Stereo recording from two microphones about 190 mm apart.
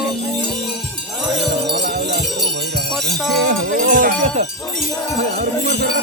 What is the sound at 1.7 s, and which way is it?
Jingle bell, 60° right (ahead or behind).